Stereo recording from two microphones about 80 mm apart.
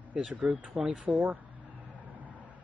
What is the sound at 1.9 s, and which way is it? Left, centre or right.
Vehicle, centre.